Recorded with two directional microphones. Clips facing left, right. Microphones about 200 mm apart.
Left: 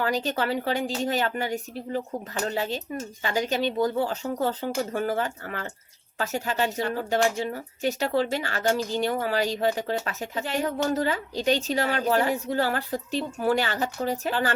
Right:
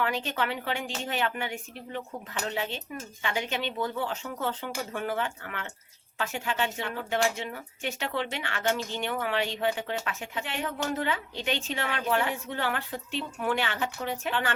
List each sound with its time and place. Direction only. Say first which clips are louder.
0.0 s speech: left 4 dB; 40° left (ahead or behind)